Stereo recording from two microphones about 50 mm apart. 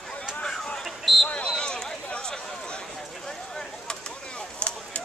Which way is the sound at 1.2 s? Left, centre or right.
Left.